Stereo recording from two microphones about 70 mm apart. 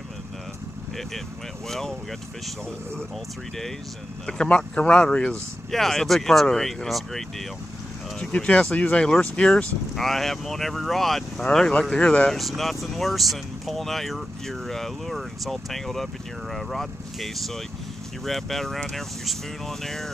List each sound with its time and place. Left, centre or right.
1.7 s speech: centre
4.3 s speech: centre
5.7 s speech: centre
8.2 s speech: centre
11.8 s speech: centre
12.4 s speech: centre